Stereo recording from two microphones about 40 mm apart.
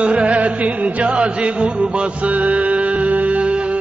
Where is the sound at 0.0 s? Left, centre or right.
Right.